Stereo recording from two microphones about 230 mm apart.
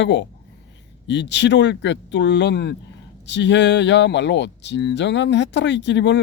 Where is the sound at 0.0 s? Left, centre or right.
Left.